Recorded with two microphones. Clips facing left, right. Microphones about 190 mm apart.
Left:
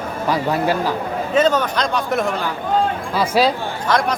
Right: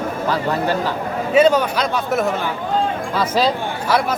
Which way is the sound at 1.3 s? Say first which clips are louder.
Right 3 dB; 10° right (ahead or behind).